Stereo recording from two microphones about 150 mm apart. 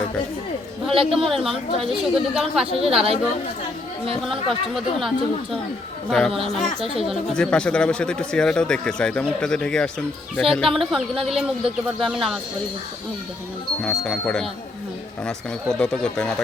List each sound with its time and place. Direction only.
0.9 s a woman's voice: 35° right (ahead or behind)
1.3 s speech: centre (ahead or behind)
2.8 s a woman's voice: 40° right (ahead or behind)
4.2 s speech: centre (ahead or behind)
13.8 s speech: 5° left (ahead or behind)